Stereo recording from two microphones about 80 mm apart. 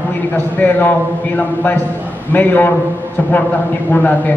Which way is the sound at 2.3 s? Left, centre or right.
Left.